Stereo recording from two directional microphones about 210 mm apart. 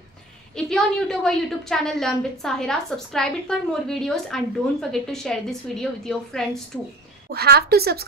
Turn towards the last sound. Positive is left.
turn(degrees=-50)  # may be behind; listen again after turning